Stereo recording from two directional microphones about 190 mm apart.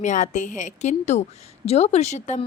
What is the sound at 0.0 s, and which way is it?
A woman's voice, 40° left (ahead or behind).